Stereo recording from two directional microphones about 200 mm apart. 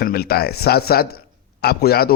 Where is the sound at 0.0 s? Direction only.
50° left (ahead or behind).